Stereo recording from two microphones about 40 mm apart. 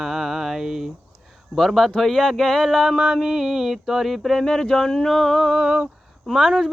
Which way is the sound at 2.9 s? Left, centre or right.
Centre.